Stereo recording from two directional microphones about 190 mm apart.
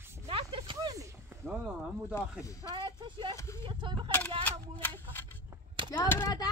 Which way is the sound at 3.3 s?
15° left (ahead or behind).